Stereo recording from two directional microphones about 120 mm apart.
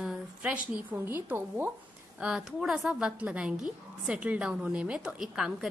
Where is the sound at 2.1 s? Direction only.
5° right (ahead or behind).